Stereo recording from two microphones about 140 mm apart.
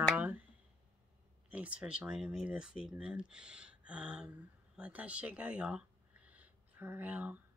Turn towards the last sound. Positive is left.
turn(degrees=-10)  # may be behind; listen again after turning